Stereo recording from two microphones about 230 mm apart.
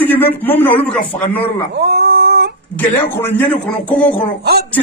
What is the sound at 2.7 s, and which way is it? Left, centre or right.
Speech, centre.